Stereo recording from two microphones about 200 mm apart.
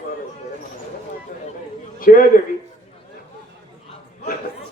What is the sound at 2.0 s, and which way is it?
Speech, 45° left (ahead or behind).